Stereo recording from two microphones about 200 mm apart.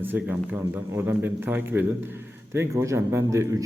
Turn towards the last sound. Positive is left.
turn(degrees=-15)  # may be behind; listen again after turning